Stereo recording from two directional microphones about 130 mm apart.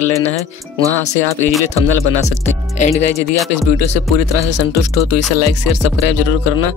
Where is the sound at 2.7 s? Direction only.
60° left (ahead or behind).